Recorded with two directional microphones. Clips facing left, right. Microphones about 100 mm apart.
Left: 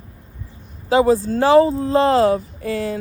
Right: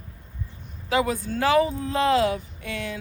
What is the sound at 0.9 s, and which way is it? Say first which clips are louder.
Speech: left 9 dB; 30° left (ahead or behind).